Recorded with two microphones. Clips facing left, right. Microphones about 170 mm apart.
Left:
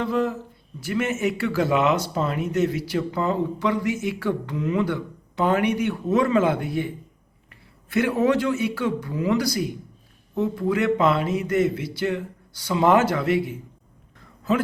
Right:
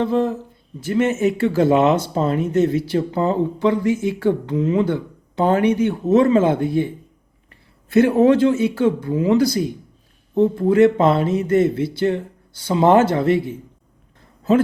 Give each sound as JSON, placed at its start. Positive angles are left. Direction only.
{"t": 0.0, "sound": "speech", "side_deg": -25}